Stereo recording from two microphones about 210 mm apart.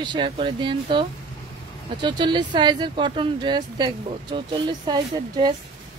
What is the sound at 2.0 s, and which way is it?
Speech, 20° right (ahead or behind).